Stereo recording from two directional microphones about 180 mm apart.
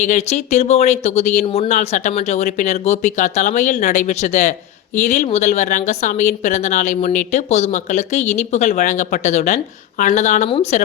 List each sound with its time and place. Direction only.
0.0 s a woman's voice: 40° left (ahead or behind)